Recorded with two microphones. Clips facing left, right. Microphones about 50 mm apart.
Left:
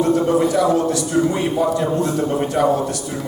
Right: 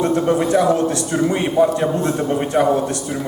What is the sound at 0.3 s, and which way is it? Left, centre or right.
A man's voice, right.